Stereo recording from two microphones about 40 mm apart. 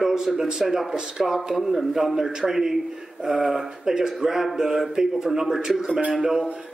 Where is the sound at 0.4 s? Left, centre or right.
Centre.